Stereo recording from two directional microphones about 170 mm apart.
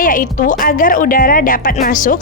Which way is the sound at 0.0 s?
50° left (ahead or behind).